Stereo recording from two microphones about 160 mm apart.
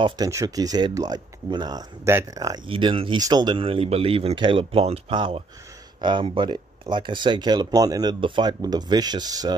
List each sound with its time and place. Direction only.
0.0 s speech: 20° right (ahead or behind)